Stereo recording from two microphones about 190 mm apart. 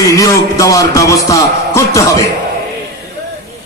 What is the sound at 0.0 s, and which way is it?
Music, 15° left (ahead or behind).